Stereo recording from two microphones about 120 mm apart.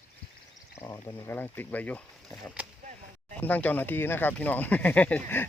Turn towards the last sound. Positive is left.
turn(degrees=15)  # may be behind; listen again after turning